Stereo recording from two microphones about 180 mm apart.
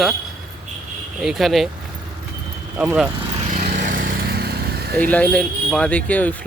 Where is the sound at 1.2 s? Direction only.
Centre (ahead or behind).